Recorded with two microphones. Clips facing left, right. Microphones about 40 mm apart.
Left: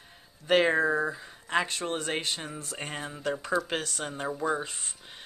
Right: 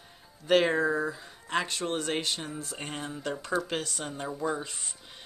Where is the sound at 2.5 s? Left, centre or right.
Left.